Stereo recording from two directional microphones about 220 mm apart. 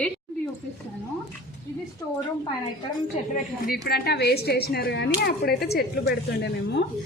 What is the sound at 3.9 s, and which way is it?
A woman's voice, 45° left (ahead or behind).